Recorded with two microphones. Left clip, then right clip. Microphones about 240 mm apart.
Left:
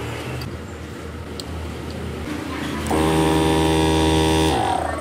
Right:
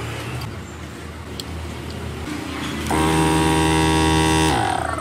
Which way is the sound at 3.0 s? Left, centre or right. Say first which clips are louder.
Even; centre.